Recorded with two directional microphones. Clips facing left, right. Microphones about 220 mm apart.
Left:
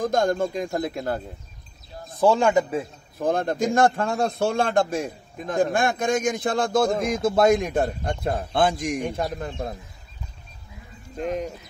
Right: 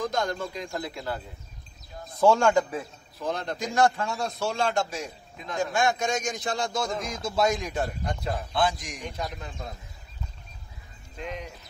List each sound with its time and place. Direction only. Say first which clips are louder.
0.0 s a man's voice: left 7 dB; 50° left (ahead or behind)
2.1 s speech: left 2 dB; 15° left (ahead or behind)
3.2 s a man's voice: left 8 dB; 50° left (ahead or behind)
11.1 s a man's voice: left 9 dB; 45° left (ahead or behind)